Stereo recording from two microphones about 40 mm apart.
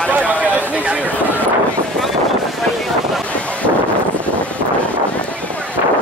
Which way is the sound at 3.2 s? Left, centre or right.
Left.